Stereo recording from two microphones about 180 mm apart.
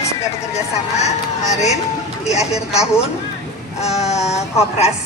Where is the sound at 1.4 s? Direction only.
40° left (ahead or behind).